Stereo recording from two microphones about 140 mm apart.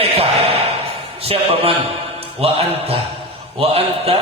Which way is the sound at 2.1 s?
45° right (ahead or behind).